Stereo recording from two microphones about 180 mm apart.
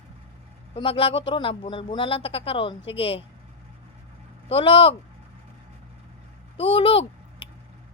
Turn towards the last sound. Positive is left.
turn(degrees=30)  # may be behind; listen again after turning